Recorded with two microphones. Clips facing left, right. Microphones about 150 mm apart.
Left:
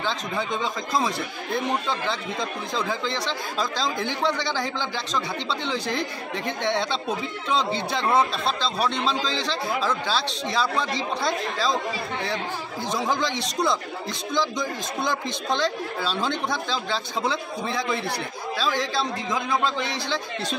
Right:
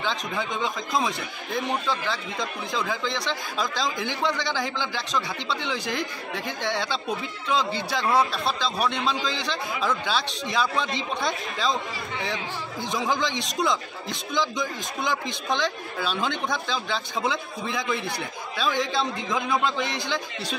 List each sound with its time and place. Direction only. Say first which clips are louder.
3.3 s speech: left 1 dB; 10° right (ahead or behind)
12.9 s speech: left 1 dB; 15° right (ahead or behind)
15.5 s speech: left 2 dB; 15° right (ahead or behind)
19.6 s speech: even; 15° right (ahead or behind)